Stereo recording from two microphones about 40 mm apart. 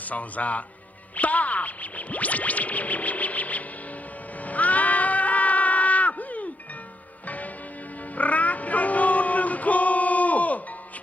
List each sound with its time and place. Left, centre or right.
0.0 s speech: left
4.4 s a sound: left
7.3 s church bell: left
8.1 s music: left